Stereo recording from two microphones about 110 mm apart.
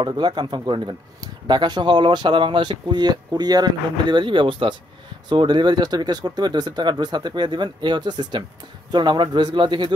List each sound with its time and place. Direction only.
0.0 s speech: 45° right (ahead or behind)